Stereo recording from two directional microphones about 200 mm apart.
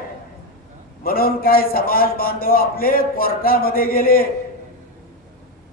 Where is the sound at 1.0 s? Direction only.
45° left (ahead or behind).